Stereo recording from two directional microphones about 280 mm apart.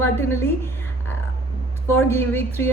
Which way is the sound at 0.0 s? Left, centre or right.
Centre.